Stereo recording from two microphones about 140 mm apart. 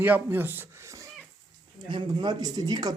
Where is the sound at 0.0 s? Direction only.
15° right (ahead or behind).